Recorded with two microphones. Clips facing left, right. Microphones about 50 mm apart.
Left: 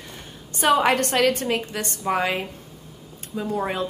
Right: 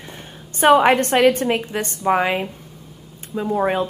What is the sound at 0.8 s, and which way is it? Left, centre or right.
A woman's voice, right.